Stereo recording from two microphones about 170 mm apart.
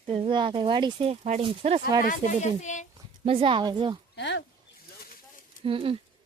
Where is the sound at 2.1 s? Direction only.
45° left (ahead or behind).